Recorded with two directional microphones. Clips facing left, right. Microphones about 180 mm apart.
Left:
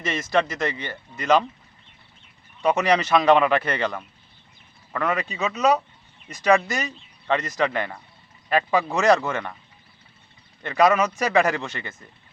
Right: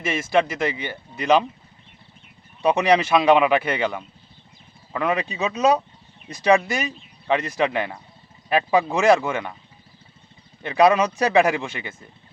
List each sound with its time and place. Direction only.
0.0 s speech: 10° right (ahead or behind)
2.6 s speech: 15° right (ahead or behind)
10.6 s speech: 10° right (ahead or behind)